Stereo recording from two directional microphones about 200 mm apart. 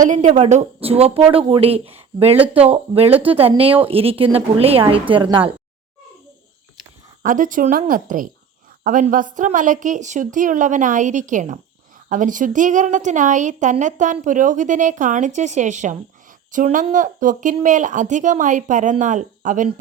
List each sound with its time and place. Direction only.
0.0 s a woman's voice: 40° right (ahead or behind)
7.2 s a woman's voice: 40° right (ahead or behind)